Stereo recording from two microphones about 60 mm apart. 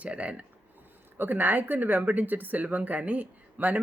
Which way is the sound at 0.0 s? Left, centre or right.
Right.